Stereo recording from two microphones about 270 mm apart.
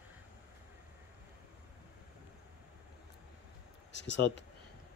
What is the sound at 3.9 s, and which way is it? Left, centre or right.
Speech, left.